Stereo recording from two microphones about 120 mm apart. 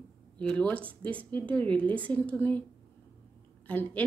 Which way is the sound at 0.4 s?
10° left (ahead or behind).